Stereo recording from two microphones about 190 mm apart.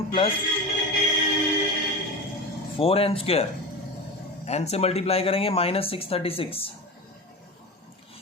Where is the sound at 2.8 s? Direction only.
30° left (ahead or behind).